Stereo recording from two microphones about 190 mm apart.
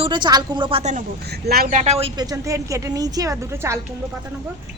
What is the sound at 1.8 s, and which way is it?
A woman's voice, 35° right (ahead or behind).